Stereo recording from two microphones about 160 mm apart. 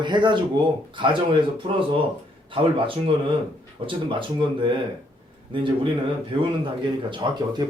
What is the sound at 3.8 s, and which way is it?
Speech, 30° right (ahead or behind).